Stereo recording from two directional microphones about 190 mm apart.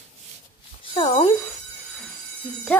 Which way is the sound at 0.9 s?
25° left (ahead or behind).